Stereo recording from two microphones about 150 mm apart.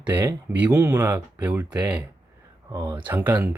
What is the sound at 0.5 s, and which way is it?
Speech, 10° right (ahead or behind).